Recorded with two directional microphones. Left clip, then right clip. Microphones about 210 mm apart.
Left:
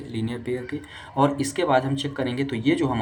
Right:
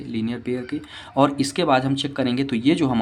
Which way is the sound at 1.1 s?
50° right (ahead or behind).